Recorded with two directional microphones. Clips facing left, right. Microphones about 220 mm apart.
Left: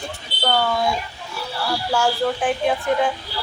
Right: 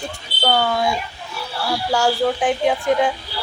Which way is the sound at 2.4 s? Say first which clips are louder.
Right 2 dB; 15° right (ahead or behind).